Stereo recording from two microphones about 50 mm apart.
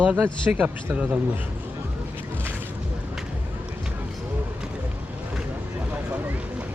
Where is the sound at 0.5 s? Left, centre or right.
Right.